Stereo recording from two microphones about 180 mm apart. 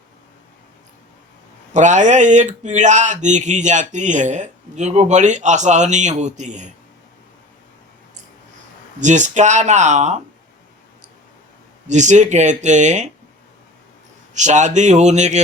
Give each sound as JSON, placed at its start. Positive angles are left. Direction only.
{"t": 1.7, "sound": "speech", "side_deg": -40}
{"t": 9.0, "sound": "speech", "side_deg": -40}
{"t": 11.9, "sound": "speech", "side_deg": -40}
{"t": 14.3, "sound": "speech", "side_deg": -40}